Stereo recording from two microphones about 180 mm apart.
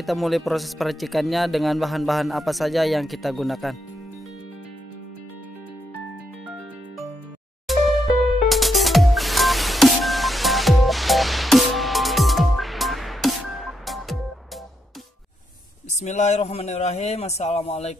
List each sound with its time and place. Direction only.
0.0 s speech: centre (ahead or behind)
7.6 s music: centre (ahead or behind)
16.0 s a man's voice: 40° left (ahead or behind)